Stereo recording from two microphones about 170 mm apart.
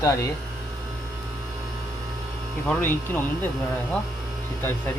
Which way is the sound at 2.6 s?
10° left (ahead or behind).